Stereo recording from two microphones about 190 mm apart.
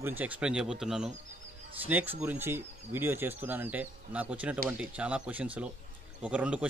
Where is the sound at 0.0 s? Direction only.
10° right (ahead or behind).